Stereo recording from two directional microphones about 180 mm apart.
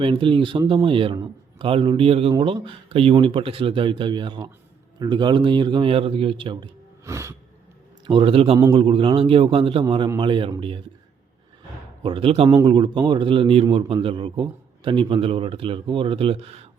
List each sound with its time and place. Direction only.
0.0 s speech: 30° right (ahead or behind)
7.0 s music: 15° right (ahead or behind)
8.0 s a man's voice: 30° right (ahead or behind)
12.0 s a man's voice: 30° right (ahead or behind)